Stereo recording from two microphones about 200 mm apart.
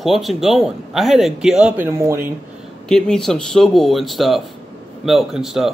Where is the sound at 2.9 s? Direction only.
Centre (ahead or behind).